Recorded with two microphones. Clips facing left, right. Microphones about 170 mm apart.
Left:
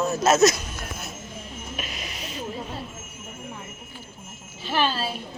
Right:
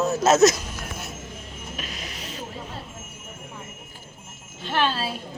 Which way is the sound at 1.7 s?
10° left (ahead or behind).